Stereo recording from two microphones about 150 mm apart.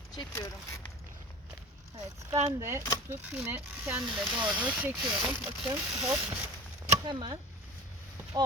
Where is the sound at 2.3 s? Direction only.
15° right (ahead or behind).